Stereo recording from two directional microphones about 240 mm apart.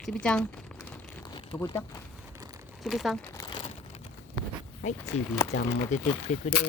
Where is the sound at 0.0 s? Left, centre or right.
Centre.